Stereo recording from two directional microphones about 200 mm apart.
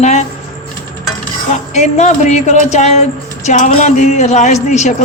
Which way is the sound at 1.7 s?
35° left (ahead or behind).